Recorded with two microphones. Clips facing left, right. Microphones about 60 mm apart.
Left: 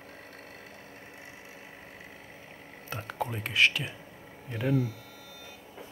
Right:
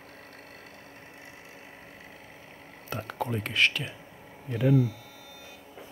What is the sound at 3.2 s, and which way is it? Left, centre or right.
Speech, centre.